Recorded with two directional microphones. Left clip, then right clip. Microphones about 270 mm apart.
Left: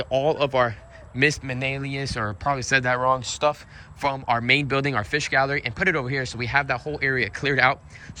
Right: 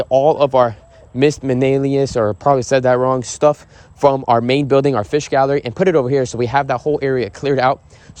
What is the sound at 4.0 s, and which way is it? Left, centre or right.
Speech, right.